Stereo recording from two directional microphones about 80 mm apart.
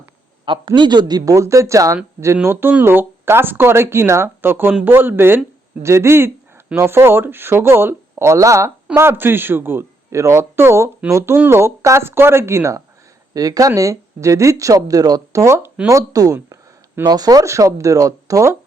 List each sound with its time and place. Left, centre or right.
0.4 s a man's voice: right
0.8 s speech: right
9.0 s speech: right
13.3 s speech: right
17.4 s speech: right